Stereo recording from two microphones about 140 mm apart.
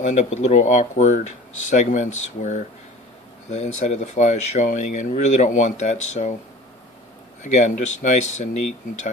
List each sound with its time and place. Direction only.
0.0 s speech: 55° left (ahead or behind)
7.4 s speech: 60° left (ahead or behind)